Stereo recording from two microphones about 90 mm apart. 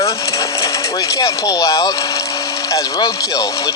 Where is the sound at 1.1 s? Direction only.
40° left (ahead or behind).